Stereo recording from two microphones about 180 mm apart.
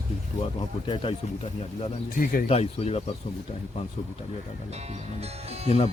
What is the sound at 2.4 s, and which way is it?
Speech, 35° left (ahead or behind).